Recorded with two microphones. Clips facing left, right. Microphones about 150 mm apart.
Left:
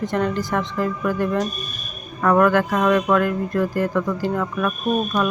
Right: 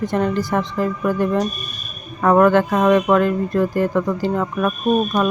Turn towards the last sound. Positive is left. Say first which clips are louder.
# right 3 dB
turn(degrees=-25)  # may be behind; listen again after turning